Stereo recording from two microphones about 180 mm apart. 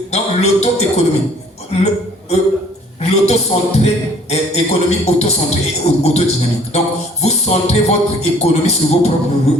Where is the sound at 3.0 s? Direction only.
35° left (ahead or behind).